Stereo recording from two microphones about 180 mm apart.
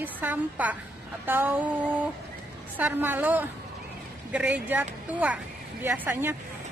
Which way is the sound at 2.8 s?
10° right (ahead or behind).